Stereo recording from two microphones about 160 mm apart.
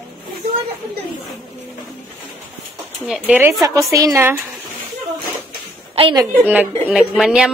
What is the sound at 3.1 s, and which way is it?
Speech, 10° right (ahead or behind).